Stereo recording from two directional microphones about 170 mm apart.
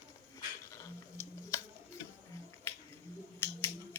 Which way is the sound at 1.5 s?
15° left (ahead or behind).